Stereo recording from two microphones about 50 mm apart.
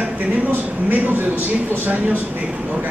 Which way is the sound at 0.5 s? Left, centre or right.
Right.